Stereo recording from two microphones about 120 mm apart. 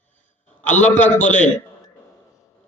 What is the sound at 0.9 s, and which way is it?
Mantra, 15° left (ahead or behind).